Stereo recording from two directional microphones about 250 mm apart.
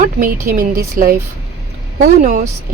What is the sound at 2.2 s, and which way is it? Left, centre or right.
Speech, right.